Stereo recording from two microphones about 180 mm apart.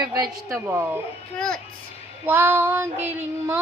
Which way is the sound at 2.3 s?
10° right (ahead or behind).